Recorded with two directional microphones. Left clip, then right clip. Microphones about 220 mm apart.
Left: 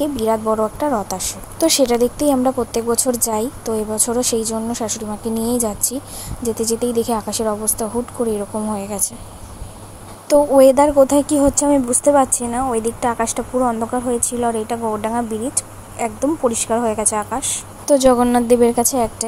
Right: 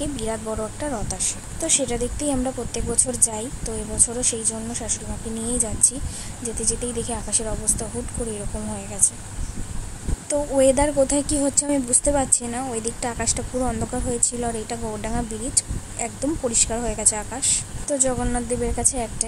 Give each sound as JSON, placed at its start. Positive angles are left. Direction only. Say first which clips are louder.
{"t": 0.0, "sound": "a woman's voice", "louder": "left 10 dB", "side_deg": 20}
{"t": 10.2, "sound": "a woman's voice", "louder": "left 8 dB", "side_deg": 25}
{"t": 17.8, "sound": "a woman's voice", "louder": "left 12 dB", "side_deg": 25}